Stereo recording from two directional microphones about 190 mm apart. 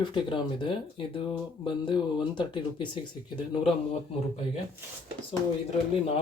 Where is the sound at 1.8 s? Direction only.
25° left (ahead or behind).